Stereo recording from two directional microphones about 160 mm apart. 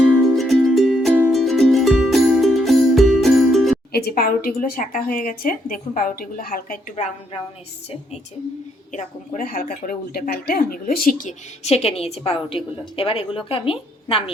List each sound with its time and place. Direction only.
0.3 s music: centre (ahead or behind)
3.9 s a woman's voice: 70° left (ahead or behind)
8.9 s a woman's voice: 50° left (ahead or behind); by 14.3 s 35° left (ahead or behind)